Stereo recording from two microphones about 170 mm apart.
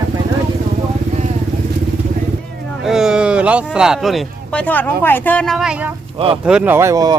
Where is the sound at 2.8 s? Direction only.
5° right (ahead or behind).